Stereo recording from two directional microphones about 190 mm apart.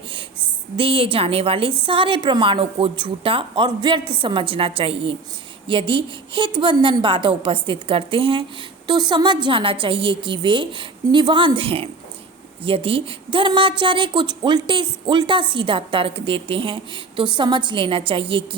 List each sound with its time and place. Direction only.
0.8 s a woman's voice: 30° right (ahead or behind)